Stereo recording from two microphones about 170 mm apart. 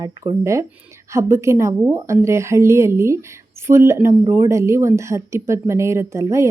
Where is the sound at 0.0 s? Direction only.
20° right (ahead or behind).